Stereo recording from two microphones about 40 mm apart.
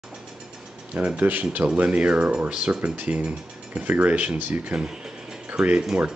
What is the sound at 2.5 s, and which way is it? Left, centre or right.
Speech, right.